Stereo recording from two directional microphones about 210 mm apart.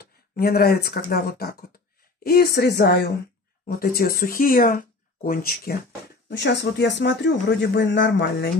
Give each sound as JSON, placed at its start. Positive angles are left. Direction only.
{"t": 0.4, "sound": "speech", "side_deg": 45}
{"t": 6.2, "sound": "speech", "side_deg": 55}